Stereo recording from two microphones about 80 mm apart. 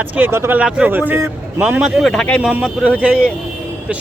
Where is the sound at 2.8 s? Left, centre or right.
Centre.